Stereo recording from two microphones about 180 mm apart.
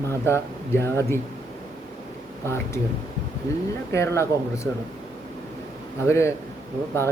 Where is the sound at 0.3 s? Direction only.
15° left (ahead or behind).